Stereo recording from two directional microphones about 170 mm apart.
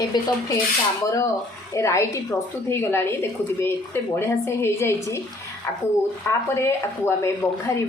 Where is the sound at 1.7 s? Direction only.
15° left (ahead or behind).